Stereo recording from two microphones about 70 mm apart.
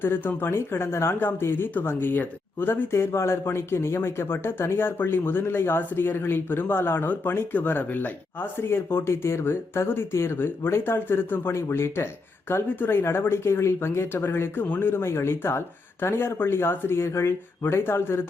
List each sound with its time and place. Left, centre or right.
0.0 s speech: left